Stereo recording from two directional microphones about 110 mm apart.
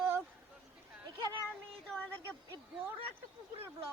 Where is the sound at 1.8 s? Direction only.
10° left (ahead or behind).